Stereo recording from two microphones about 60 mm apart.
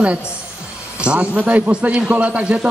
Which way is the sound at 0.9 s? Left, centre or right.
Centre.